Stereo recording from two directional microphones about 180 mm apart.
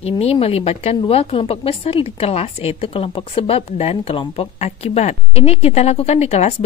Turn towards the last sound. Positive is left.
turn(degrees=35)  # may be behind; listen again after turning